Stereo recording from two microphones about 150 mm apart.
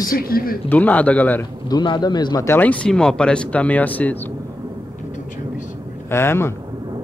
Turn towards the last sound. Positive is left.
turn(degrees=15)  # may be behind; listen again after turning